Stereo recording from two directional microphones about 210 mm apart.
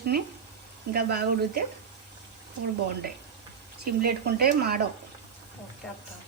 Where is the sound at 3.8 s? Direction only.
50° right (ahead or behind).